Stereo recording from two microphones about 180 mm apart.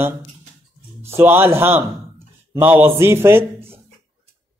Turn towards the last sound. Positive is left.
turn(degrees=-15)  # may be behind; listen again after turning